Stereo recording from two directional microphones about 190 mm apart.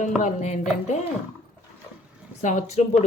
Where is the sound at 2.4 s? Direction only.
35° left (ahead or behind).